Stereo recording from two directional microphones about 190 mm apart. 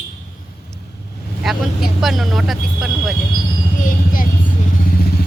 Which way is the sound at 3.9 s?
45° left (ahead or behind).